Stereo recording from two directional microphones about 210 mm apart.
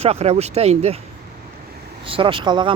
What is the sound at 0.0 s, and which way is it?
Speech, 30° right (ahead or behind).